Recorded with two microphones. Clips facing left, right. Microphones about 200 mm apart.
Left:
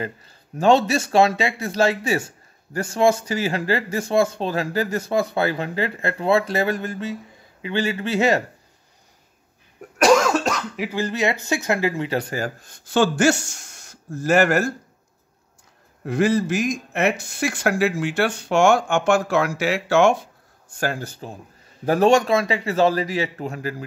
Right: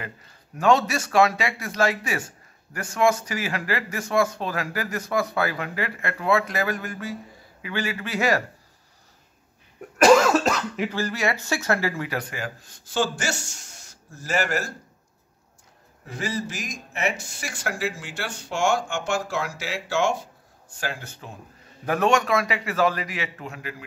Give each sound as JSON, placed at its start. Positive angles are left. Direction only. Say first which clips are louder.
{"t": 0.6, "sound": "a man's voice", "louder": "left 4 dB", "side_deg": 30}
{"t": 9.9, "sound": "cough", "louder": "even", "side_deg": 0}
{"t": 10.9, "sound": "a man's voice", "louder": "left 6 dB", "side_deg": 20}
{"t": 12.6, "sound": "speech", "louder": "left 6 dB", "side_deg": 60}
{"t": 16.1, "sound": "speech", "louder": "left 11 dB", "side_deg": 60}
{"t": 20.8, "sound": "a man's voice", "louder": "left 7 dB", "side_deg": 40}